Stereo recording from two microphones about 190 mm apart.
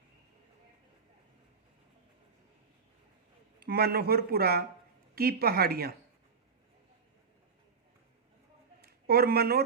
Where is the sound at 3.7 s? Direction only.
55° right (ahead or behind).